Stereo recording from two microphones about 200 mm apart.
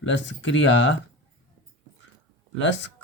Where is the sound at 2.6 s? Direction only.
65° left (ahead or behind).